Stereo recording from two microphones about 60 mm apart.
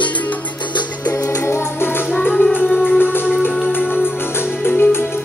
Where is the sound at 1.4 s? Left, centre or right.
Left.